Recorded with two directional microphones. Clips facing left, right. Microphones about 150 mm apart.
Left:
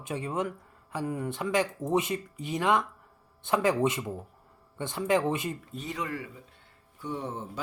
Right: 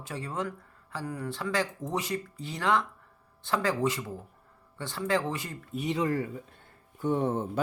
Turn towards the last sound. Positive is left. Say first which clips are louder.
# right 7 dB
turn(degrees=-55)  # may be behind; listen again after turning